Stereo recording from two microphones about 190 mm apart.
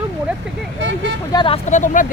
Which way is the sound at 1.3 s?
30° left (ahead or behind).